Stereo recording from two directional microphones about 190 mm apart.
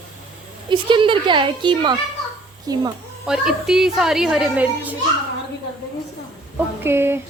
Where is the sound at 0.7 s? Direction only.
25° right (ahead or behind).